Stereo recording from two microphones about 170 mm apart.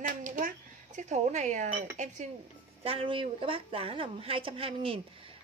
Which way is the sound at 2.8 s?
35° right (ahead or behind).